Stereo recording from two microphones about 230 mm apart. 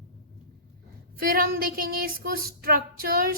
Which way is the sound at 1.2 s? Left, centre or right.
Right.